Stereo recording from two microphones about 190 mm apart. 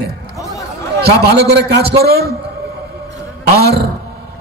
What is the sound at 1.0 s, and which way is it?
A man's voice, 55° right (ahead or behind).